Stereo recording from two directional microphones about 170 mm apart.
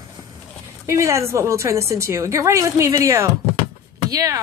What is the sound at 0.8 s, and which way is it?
A woman's voice, 15° right (ahead or behind).